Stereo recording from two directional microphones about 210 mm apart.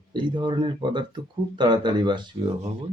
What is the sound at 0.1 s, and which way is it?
Speech, 20° right (ahead or behind).